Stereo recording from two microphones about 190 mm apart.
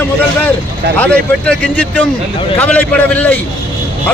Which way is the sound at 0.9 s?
5° left (ahead or behind).